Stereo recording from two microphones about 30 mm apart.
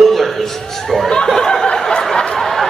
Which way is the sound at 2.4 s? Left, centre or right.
Centre.